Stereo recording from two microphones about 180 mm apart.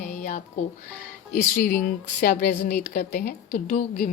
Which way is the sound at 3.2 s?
45° left (ahead or behind).